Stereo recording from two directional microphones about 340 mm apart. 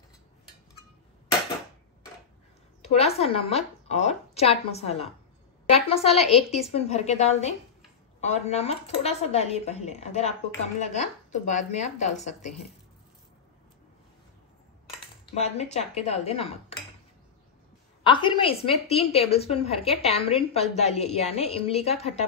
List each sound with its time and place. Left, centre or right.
2.8 s a woman's voice: centre
15.3 s a woman's voice: centre
18.0 s a woman's voice: centre